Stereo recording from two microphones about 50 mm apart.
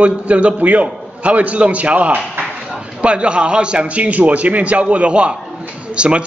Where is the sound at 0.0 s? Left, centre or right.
Right.